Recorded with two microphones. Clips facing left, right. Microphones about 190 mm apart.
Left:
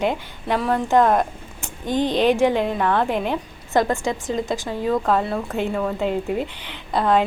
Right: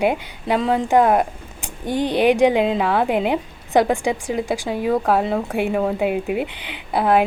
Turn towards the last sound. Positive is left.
turn(degrees=-10)  # may be behind; listen again after turning